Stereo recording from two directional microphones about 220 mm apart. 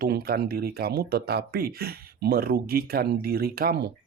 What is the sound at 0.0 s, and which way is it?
Speech, 45° right (ahead or behind).